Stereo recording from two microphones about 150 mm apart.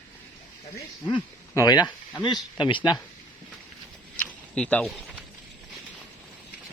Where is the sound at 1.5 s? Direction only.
25° left (ahead or behind).